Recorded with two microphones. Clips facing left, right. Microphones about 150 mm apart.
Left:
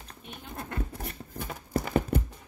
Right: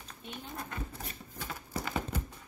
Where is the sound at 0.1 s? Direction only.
55° left (ahead or behind).